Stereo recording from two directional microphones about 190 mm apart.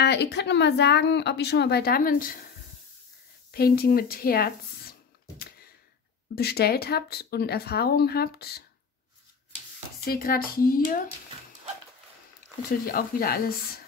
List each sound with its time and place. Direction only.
0.0 s speech: 60° left (ahead or behind)
3.5 s a woman's voice: 55° left (ahead or behind)
6.3 s speech: 55° left (ahead or behind)
10.0 s a woman's voice: 50° left (ahead or behind)
12.6 s a woman's voice: 50° left (ahead or behind)